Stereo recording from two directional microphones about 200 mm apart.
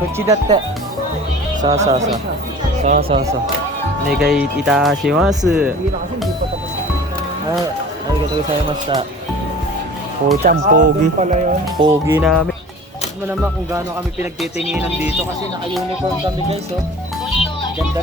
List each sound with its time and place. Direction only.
0.3 s speech: 20° right (ahead or behind)
1.7 s speech: 35° right (ahead or behind)
4.2 s speech: 5° right (ahead or behind)
10.4 s speech: 55° right (ahead or behind)
11.0 s speech: 35° right (ahead or behind)
11.8 s speech: 15° right (ahead or behind)
14.7 s speech: 10° right (ahead or behind)